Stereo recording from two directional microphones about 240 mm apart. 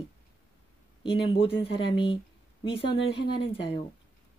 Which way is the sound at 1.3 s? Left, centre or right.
Left.